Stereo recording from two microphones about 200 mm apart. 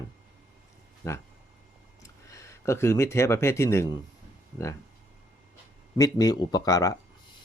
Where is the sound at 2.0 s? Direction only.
15° left (ahead or behind).